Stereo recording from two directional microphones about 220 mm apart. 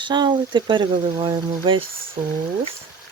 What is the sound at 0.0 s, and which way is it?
Speech, 20° right (ahead or behind).